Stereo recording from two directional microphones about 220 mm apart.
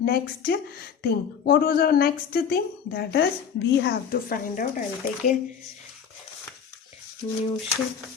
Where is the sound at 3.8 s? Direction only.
40° left (ahead or behind).